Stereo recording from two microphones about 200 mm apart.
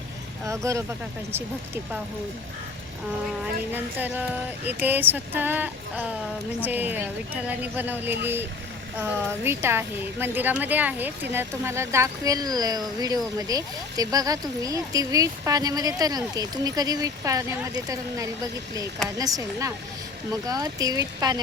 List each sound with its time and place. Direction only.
0.4 s a woman's voice: 15° right (ahead or behind)
3.7 s a woman's voice: 10° right (ahead or behind)